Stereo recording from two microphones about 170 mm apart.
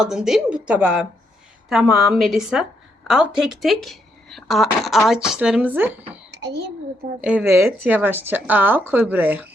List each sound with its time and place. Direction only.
0.0 s speech: 5° right (ahead or behind)
6.3 s a child's voice: 85° right
7.2 s a woman's voice: 10° right (ahead or behind)